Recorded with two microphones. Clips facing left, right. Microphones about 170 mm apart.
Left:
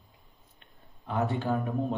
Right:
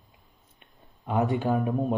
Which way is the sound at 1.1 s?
15° right (ahead or behind).